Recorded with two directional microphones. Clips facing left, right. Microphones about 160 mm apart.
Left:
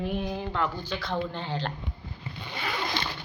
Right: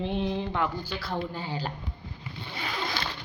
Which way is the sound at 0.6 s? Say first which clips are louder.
Even; 10° right (ahead or behind).